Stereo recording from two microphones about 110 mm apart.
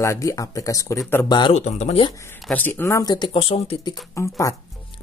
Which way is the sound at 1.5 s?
85° left.